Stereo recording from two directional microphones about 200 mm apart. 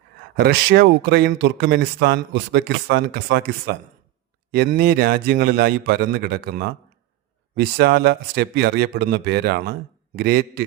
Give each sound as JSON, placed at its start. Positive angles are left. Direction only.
{"t": 0.3, "sound": "speech", "side_deg": -55}